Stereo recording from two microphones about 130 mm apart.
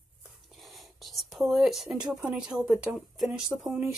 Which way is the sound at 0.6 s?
Centre (ahead or behind).